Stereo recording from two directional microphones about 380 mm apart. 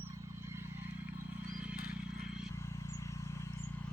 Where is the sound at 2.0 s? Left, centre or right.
Centre.